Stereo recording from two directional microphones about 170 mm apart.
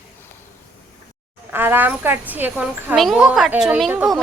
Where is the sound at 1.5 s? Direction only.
10° right (ahead or behind).